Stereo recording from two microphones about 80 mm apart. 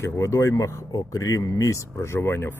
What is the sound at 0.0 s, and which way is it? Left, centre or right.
Speech, left.